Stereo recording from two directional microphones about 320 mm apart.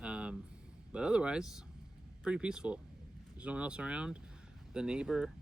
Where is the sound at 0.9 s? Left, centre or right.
Centre.